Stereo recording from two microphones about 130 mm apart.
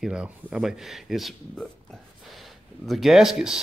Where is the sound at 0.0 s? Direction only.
5° right (ahead or behind).